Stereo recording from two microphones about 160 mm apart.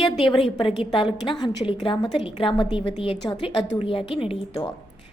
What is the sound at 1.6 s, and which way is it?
A woman's voice, 30° left (ahead or behind).